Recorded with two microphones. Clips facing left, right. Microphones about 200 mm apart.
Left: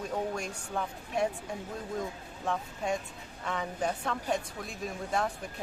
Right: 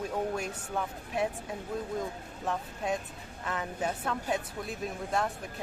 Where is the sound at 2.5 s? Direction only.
Centre (ahead or behind).